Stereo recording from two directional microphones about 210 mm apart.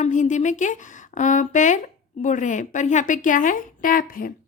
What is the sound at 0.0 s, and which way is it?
Speech, 35° left (ahead or behind).